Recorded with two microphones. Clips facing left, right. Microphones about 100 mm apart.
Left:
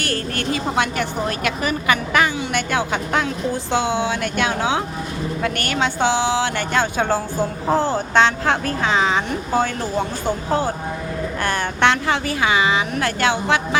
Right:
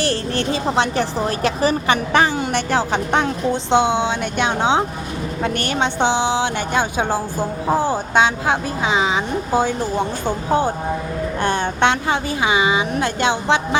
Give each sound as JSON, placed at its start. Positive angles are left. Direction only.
{"t": 0.0, "sound": "speech", "side_deg": -30}